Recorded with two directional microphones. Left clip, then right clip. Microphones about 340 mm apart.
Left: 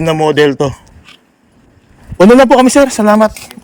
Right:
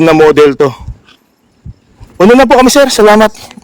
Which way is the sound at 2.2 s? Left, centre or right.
Centre.